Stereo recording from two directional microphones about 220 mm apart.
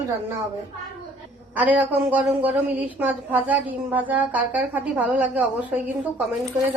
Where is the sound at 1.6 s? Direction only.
5° right (ahead or behind).